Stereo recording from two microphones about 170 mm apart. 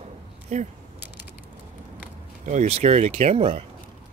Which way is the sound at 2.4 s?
40° right (ahead or behind).